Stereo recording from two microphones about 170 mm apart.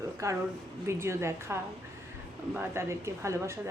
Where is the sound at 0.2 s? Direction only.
20° right (ahead or behind).